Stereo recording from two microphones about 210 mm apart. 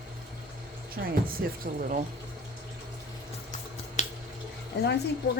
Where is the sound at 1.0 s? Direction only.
50° right (ahead or behind).